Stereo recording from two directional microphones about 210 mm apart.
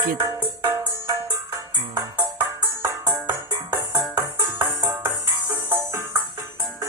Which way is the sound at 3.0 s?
20° right (ahead or behind).